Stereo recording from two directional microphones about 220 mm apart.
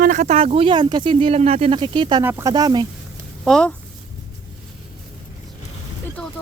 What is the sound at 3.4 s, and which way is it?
Speech, 5° left (ahead or behind).